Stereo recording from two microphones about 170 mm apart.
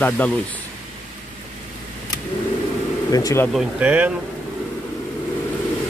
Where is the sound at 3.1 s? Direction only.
20° left (ahead or behind).